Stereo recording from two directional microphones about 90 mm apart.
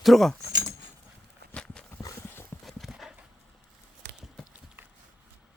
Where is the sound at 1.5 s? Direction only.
10° left (ahead or behind).